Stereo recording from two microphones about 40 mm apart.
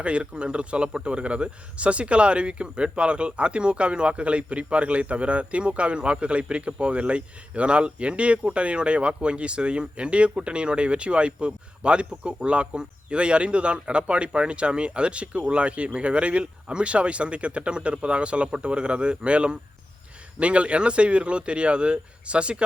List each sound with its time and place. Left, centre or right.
0.0 s a man's voice: right